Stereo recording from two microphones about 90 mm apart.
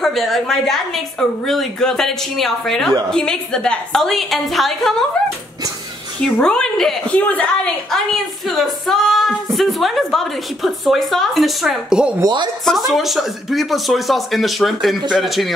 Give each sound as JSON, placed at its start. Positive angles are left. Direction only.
{"t": 0.0, "sound": "speech", "side_deg": 0}
{"t": 6.2, "sound": "a woman's voice", "side_deg": 10}
{"t": 7.2, "sound": "a woman's voice", "side_deg": 15}
{"t": 7.9, "sound": "speech", "side_deg": 0}